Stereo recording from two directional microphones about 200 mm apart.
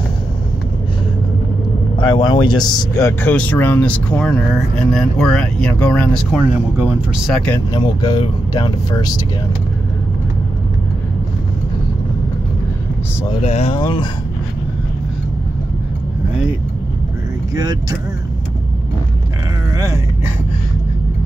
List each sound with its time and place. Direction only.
2.0 s speech: 25° left (ahead or behind); by 7.5 s centre (ahead or behind)
7.5 s speech: 20° left (ahead or behind)
13.4 s speech: 30° left (ahead or behind)